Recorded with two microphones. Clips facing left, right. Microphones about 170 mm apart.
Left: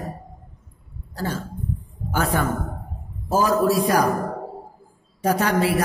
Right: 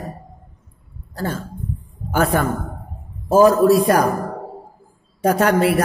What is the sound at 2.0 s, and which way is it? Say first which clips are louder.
A woman's voice: right 4 dB; 55° right (ahead or behind).